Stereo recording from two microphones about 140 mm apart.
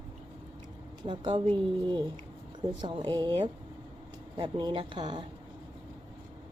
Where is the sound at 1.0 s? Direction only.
35° right (ahead or behind).